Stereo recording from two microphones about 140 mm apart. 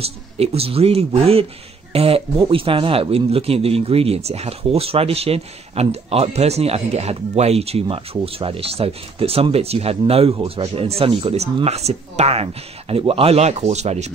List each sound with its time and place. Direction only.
0.0 s speech: 45° right (ahead or behind)